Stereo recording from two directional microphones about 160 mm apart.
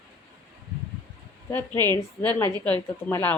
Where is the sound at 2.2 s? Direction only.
15° left (ahead or behind).